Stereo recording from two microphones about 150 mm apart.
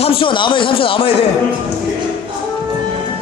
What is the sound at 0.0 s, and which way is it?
Speech, 35° left (ahead or behind).